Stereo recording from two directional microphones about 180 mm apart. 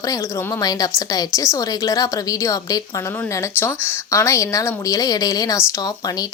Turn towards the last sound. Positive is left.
turn(degrees=20)  # may be behind; listen again after turning